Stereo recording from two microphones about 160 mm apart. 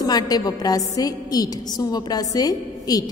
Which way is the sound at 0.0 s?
25° left (ahead or behind).